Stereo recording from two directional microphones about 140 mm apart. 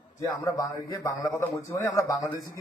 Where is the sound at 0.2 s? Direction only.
25° left (ahead or behind).